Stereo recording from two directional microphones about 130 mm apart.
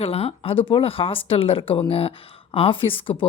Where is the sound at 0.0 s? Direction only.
50° left (ahead or behind).